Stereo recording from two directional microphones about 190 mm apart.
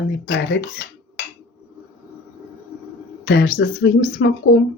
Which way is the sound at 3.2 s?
65° left (ahead or behind).